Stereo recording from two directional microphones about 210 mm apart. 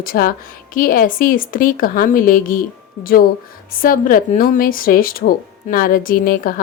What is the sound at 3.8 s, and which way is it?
A woman's voice, 40° left (ahead or behind).